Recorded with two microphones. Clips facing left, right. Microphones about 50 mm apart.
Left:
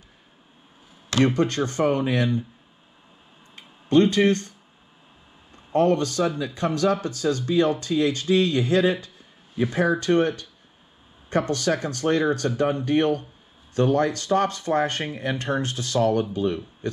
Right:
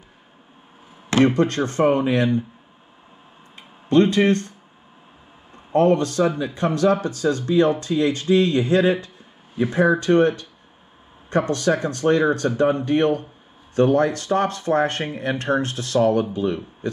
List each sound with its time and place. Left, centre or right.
1.1 s speech: right
4.0 s speech: centre
5.7 s speech: centre
7.0 s speech: centre
7.2 s speech: right
11.3 s speech: right
12.0 s speech: centre
13.7 s speech: centre